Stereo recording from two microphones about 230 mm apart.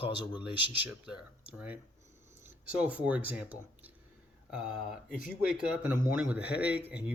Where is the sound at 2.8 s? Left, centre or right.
Centre.